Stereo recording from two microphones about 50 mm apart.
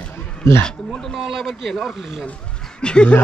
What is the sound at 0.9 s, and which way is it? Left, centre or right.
Speech, centre.